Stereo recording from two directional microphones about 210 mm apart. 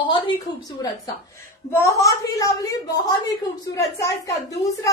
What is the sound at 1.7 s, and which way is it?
A woman's voice, 15° left (ahead or behind).